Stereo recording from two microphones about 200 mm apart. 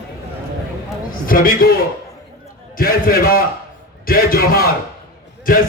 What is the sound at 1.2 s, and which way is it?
Speech, 45° left (ahead or behind).